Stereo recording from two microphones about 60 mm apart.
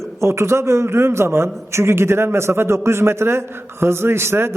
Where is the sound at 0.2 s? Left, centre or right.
Right.